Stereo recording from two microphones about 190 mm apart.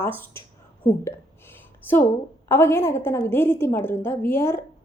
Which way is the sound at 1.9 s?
10° left (ahead or behind).